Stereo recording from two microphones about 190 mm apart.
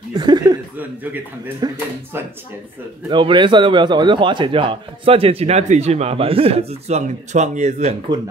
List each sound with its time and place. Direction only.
0.2 s a man's voice: 20° right (ahead or behind)
0.7 s speech: 10° right (ahead or behind)
3.1 s a man's voice: 25° right (ahead or behind)
8.1 s a man's voice: 20° right (ahead or behind)